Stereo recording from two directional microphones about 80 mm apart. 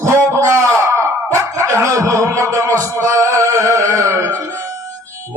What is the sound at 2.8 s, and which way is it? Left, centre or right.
Music, right.